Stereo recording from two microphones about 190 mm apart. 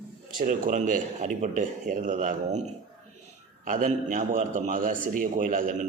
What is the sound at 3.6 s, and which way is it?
A man's voice, 45° right (ahead or behind).